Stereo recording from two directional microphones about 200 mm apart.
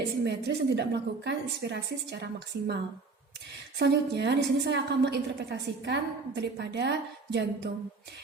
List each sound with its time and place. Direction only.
0.3 s a woman's voice: 55° right (ahead or behind)